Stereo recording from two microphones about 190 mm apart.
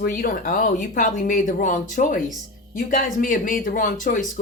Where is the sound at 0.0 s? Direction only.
50° left (ahead or behind).